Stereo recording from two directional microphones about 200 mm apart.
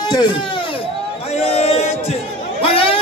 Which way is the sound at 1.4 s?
30° left (ahead or behind).